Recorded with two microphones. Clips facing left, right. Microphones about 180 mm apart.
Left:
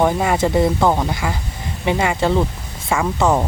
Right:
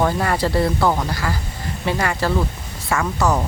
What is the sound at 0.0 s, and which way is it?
Speech, 15° left (ahead or behind).